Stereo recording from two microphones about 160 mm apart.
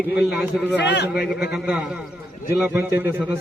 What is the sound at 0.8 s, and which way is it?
Speech, 90° left.